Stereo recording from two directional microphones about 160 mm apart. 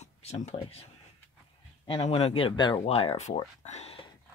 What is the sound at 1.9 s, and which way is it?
Speech, 35° left (ahead or behind).